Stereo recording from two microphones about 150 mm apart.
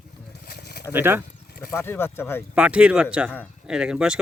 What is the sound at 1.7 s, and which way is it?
Speech, 15° left (ahead or behind).